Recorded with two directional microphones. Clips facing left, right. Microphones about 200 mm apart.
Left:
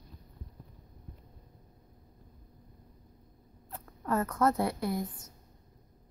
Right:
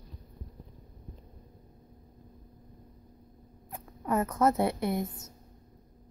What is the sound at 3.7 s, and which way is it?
Speech, 15° right (ahead or behind).